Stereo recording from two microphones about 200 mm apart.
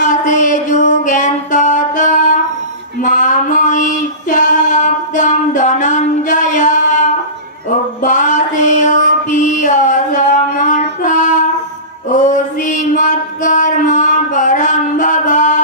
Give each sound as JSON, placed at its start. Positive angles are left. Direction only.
{"t": 0.0, "sound": "music", "side_deg": 40}
{"t": 3.0, "sound": "female singing", "side_deg": 40}
{"t": 8.0, "sound": "mantra", "side_deg": 40}
{"t": 10.6, "sound": "child singing", "side_deg": 40}
{"t": 12.1, "sound": "music", "side_deg": 40}